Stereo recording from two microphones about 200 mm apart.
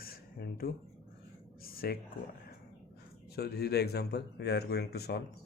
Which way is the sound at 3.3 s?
50° left (ahead or behind).